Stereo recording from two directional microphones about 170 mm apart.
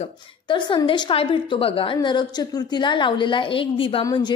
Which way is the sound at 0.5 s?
30° left (ahead or behind).